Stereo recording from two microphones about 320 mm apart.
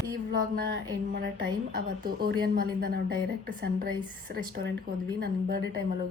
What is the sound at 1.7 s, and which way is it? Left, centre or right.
A woman's voice, right.